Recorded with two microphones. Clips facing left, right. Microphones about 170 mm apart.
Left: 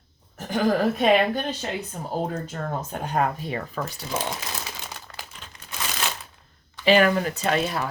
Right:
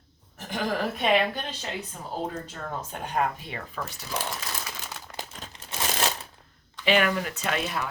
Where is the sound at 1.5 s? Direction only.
45° left (ahead or behind).